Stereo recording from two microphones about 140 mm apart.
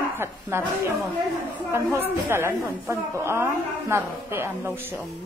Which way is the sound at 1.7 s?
15° right (ahead or behind).